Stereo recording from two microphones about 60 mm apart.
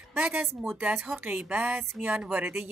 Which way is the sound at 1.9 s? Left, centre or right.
Right.